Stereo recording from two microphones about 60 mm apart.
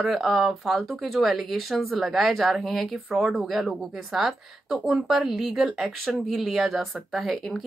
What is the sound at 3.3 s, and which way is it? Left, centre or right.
Speech, centre.